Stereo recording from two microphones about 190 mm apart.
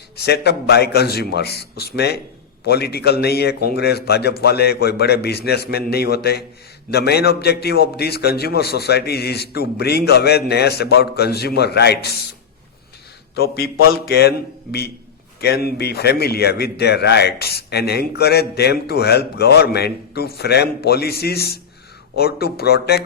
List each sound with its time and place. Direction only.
0.2 s a man's voice: 60° left (ahead or behind)
14.1 s a man's voice: 60° left (ahead or behind)